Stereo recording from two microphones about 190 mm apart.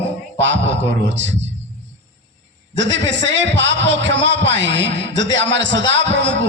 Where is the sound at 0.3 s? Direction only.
75° right (ahead or behind).